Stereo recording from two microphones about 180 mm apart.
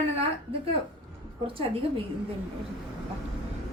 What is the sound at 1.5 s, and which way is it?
Speech, 30° right (ahead or behind).